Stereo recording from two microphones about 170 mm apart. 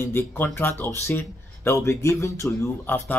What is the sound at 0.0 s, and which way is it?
Speech, 15° left (ahead or behind).